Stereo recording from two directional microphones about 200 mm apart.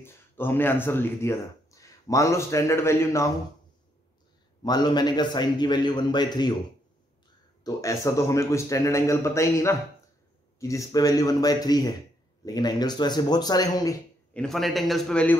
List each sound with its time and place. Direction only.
0.0 s speech: 10° left (ahead or behind)
4.6 s a man's voice: 20° left (ahead or behind)
7.6 s a man's voice: 15° left (ahead or behind)
14.3 s a man's voice: centre (ahead or behind)